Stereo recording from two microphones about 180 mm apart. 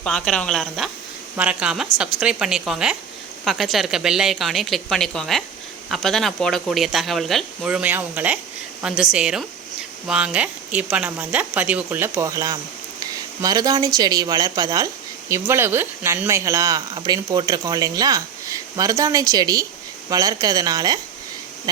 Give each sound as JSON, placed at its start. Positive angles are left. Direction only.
{"t": 0.0, "sound": "speech", "side_deg": 5}